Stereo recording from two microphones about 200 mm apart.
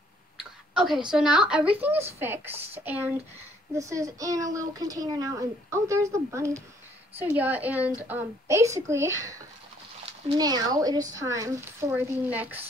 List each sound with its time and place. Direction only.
0.4 s speech: centre (ahead or behind)